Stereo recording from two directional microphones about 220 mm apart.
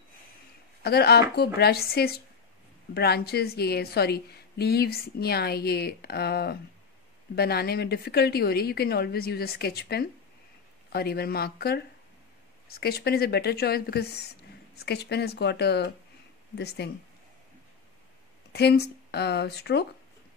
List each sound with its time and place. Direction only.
0.8 s a woman's voice: 45° left (ahead or behind)
18.5 s speech: 45° left (ahead or behind)